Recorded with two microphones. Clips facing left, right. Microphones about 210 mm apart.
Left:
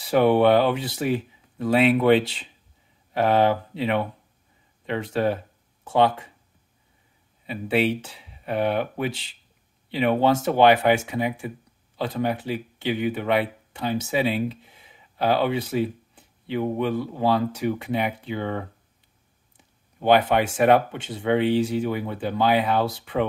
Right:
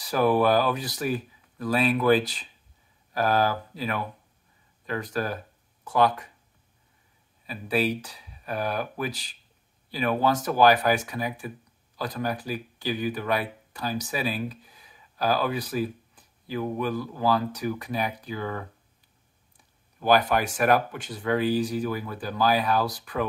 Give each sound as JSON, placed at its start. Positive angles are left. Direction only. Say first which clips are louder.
{"t": 0.0, "sound": "speech", "louder": "left 4 dB", "side_deg": 25}
{"t": 7.4, "sound": "speech", "louder": "left 4 dB", "side_deg": 25}